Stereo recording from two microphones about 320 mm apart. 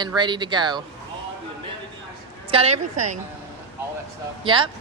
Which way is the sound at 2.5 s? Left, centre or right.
Centre.